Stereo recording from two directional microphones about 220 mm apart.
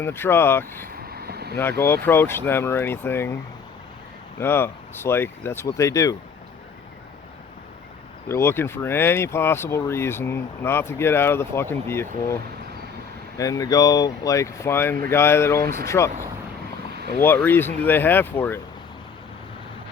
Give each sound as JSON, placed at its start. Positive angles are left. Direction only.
{"t": 0.0, "sound": "speech", "side_deg": 10}
{"t": 1.0, "sound": "vehicle", "side_deg": -45}
{"t": 1.8, "sound": "speech", "side_deg": 10}
{"t": 4.4, "sound": "speech", "side_deg": 10}
{"t": 8.3, "sound": "speech", "side_deg": 10}
{"t": 17.2, "sound": "speech", "side_deg": 10}